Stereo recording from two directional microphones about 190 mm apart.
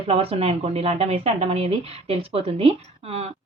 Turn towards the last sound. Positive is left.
turn(degrees=-30)  # may be behind; listen again after turning